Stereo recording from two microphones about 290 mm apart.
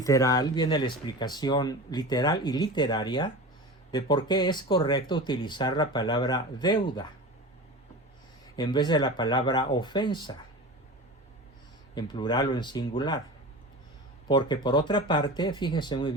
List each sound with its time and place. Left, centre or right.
0.0 s speech: centre
8.5 s speech: centre
11.9 s speech: centre
14.3 s speech: centre